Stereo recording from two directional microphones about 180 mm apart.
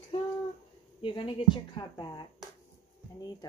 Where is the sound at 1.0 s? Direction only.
25° left (ahead or behind).